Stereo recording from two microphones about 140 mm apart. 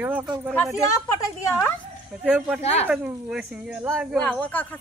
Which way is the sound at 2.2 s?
10° right (ahead or behind).